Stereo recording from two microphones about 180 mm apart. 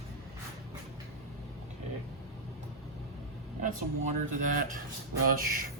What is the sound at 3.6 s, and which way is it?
Speech, 45° right (ahead or behind).